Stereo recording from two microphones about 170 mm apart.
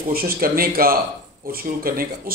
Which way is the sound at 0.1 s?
60° right (ahead or behind).